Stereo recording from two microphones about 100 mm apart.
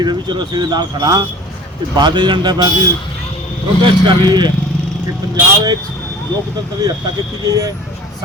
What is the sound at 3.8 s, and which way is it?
Speech, 50° right (ahead or behind).